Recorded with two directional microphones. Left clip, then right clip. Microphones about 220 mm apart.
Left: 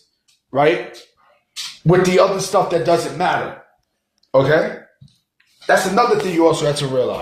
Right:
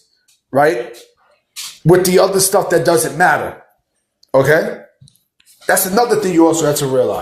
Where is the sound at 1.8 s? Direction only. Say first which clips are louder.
Right 2 dB; 45° right (ahead or behind).